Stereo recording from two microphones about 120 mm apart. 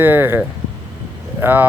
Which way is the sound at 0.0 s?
15° right (ahead or behind).